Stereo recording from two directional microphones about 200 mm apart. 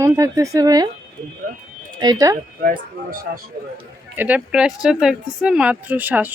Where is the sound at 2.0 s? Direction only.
20° right (ahead or behind).